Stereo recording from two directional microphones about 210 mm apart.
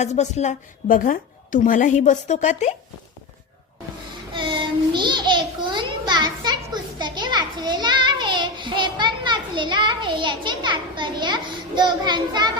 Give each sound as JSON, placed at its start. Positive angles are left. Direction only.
{"t": 0.0, "sound": "a woman's voice", "side_deg": 30}
{"t": 4.4, "sound": "child singing", "side_deg": -20}
{"t": 7.0, "sound": "a sound", "side_deg": -20}